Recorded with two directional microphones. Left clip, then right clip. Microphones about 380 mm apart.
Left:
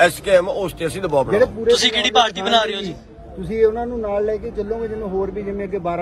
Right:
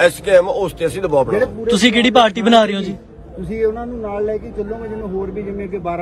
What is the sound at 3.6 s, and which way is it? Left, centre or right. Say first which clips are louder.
A man's voice: left 1 dB; left.